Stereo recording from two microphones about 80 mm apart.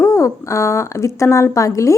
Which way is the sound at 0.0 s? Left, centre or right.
Left.